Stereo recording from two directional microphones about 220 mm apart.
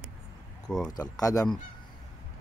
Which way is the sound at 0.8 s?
15° left (ahead or behind).